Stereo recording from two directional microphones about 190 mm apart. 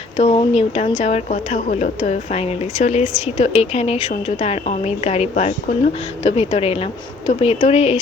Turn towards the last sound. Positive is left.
turn(degrees=35)  # may be behind; listen again after turning